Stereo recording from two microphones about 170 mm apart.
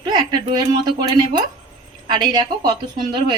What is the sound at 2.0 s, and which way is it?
A woman's voice, 25° right (ahead or behind).